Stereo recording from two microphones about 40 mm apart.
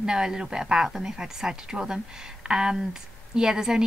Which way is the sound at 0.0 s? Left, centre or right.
Centre.